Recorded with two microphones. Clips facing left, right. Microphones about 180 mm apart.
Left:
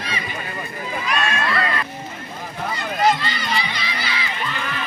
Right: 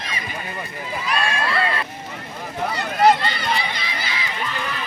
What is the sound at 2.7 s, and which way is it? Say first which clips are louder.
Run: right 3 dB; 60° right (ahead or behind).